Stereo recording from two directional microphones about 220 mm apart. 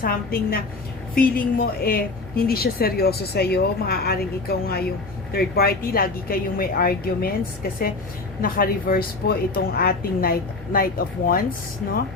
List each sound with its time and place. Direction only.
0.0 s a woman's voice: 40° left (ahead or behind)
8.4 s a woman's voice: 40° left (ahead or behind)